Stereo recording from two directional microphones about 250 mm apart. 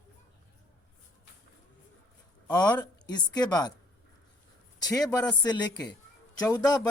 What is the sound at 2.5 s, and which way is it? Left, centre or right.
Speech, centre.